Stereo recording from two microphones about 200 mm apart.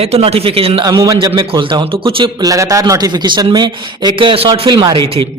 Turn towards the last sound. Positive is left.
turn(degrees=-25)  # may be behind; listen again after turning